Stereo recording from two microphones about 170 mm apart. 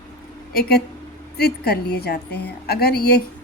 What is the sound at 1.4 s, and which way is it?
A woman's voice, 70° left (ahead or behind).